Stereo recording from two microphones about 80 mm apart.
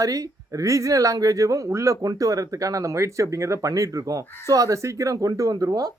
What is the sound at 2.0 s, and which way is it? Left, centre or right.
Speech, right.